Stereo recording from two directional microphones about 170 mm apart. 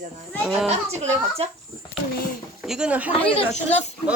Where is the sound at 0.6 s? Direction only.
40° right (ahead or behind).